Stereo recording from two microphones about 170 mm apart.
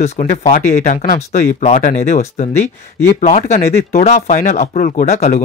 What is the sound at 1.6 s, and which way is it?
Speech, 40° left (ahead or behind).